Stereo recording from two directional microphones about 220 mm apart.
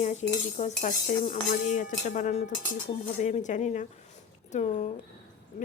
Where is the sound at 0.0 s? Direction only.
30° left (ahead or behind).